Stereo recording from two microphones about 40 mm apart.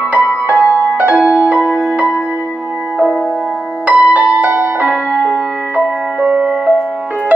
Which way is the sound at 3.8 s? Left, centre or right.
Right.